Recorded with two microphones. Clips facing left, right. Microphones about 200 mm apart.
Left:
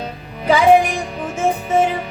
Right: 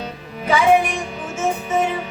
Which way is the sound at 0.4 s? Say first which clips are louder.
Left 3 dB; 35° left (ahead or behind).